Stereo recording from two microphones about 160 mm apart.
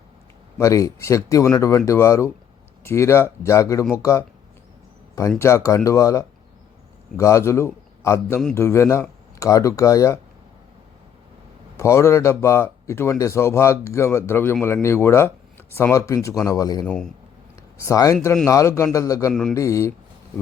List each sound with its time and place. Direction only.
0.6 s speech: 20° left (ahead or behind)
5.4 s a man's voice: 15° left (ahead or behind)
11.8 s speech: 15° left (ahead or behind)
16.8 s speech: 5° left (ahead or behind)
17.8 s speech: 20° left (ahead or behind)
19.3 s speech: 5° left (ahead or behind)
19.5 s speech: 20° left (ahead or behind)